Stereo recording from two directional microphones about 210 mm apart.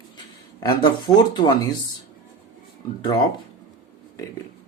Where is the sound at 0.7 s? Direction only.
20° left (ahead or behind).